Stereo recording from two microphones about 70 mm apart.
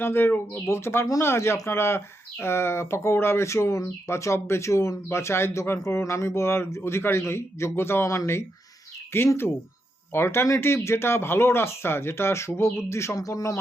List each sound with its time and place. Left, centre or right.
0.0 s speech: left
8.0 s speech: left
13.1 s speech: left